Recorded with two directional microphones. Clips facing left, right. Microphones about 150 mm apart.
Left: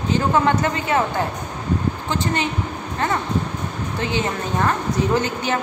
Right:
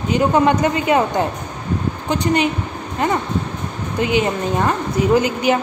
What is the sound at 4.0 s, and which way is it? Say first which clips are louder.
A woman's voice: right 6 dB; 15° right (ahead or behind).